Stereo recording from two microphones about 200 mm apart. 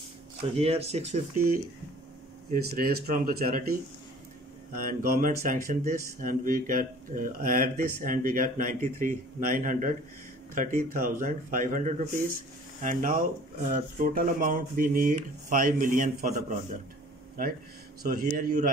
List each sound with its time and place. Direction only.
0.6 s speech: 30° right (ahead or behind)
2.7 s speech: 45° right (ahead or behind)
4.7 s speech: 45° right (ahead or behind)